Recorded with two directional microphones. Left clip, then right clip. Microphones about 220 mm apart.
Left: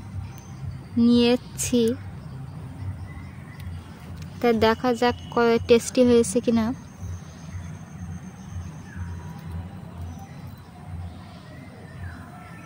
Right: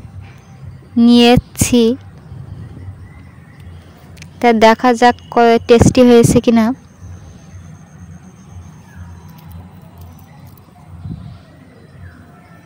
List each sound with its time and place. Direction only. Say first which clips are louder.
0.9 s speech: right 11 dB; 40° right (ahead or behind)
4.2 s speech: right 11 dB; 40° right (ahead or behind)